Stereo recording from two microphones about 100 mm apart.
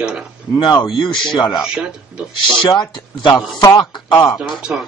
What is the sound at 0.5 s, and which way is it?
Speech, 45° left (ahead or behind).